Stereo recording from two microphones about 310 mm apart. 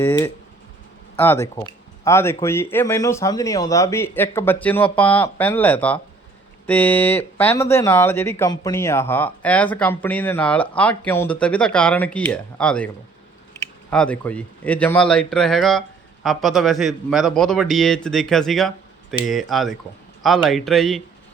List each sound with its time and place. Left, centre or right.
0.0 s speech: centre